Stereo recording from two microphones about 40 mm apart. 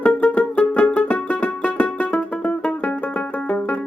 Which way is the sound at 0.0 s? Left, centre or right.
Left.